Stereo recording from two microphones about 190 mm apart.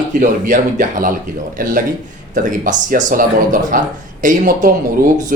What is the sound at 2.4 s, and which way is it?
Speech, 45° right (ahead or behind).